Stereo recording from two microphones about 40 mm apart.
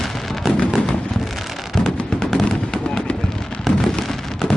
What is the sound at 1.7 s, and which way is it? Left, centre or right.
Fireworks, centre.